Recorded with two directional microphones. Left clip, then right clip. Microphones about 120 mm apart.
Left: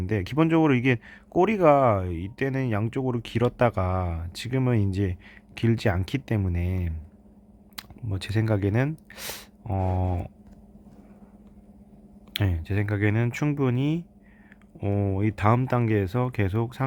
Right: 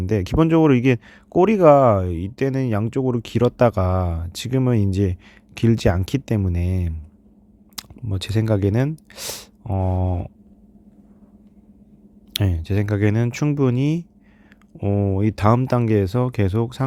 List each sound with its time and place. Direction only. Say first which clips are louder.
0.0 s speech: right 5 dB; 45° right (ahead or behind)
7.8 s speech: right 5 dB; 35° right (ahead or behind)
12.3 s speech: right 5 dB; 45° right (ahead or behind)
14.8 s speech: right 5 dB; 35° right (ahead or behind)